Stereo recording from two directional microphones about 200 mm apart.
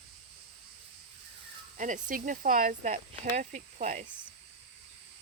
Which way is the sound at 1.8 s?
40° right (ahead or behind).